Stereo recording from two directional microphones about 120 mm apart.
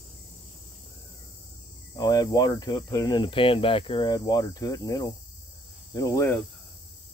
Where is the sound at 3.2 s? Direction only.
45° left (ahead or behind); by 5.1 s 30° left (ahead or behind).